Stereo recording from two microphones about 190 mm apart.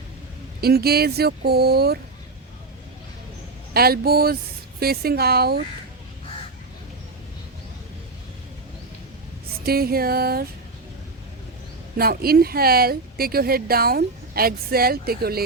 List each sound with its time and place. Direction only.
0.6 s speech: 55° right (ahead or behind)
3.8 s a woman's voice: 55° right (ahead or behind)
9.6 s a woman's voice: 55° right (ahead or behind)
11.9 s a woman's voice: 55° right (ahead or behind)